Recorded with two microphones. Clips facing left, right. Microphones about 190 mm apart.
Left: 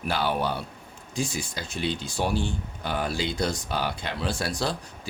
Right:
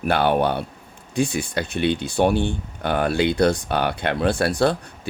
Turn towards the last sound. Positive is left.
turn(degrees=-60)  # may be behind; listen again after turning